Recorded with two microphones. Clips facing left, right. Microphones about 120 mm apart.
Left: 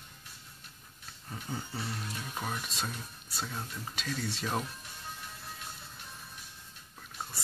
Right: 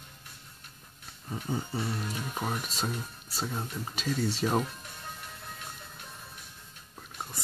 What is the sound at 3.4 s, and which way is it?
Speech, 20° right (ahead or behind).